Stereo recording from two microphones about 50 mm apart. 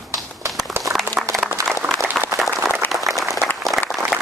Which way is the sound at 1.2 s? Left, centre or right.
Right.